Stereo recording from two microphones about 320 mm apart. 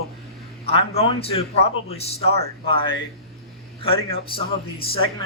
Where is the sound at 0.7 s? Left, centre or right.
Centre.